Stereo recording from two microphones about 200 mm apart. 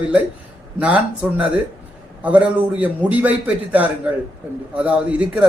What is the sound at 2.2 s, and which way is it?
Speech, 5° right (ahead or behind).